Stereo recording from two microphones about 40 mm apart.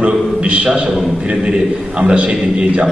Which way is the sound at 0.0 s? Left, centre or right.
Right.